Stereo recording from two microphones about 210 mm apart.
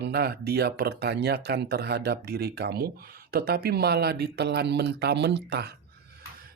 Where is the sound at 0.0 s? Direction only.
50° right (ahead or behind).